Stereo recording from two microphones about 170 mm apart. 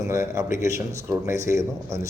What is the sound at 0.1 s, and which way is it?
Speech, 15° right (ahead or behind).